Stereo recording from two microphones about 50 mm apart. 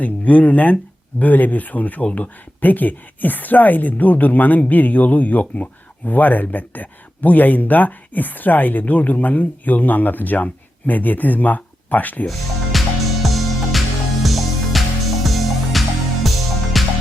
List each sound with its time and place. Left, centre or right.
0.0 s speech: left
12.3 s music: centre